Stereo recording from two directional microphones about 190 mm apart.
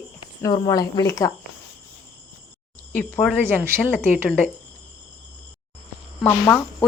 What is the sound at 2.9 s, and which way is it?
Cricket, 10° left (ahead or behind).